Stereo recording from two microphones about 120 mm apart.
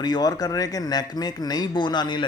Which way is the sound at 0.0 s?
35° left (ahead or behind).